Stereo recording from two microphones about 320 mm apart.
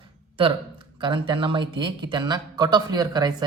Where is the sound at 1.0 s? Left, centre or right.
Centre.